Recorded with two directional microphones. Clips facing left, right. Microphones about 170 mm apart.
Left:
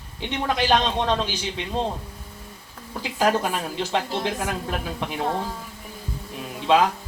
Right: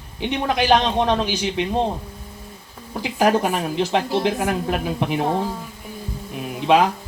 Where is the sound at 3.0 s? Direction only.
15° right (ahead or behind).